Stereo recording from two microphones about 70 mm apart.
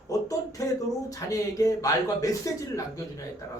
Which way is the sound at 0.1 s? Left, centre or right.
Left.